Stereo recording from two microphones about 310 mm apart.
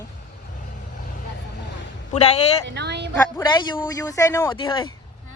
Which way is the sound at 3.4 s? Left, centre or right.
Centre.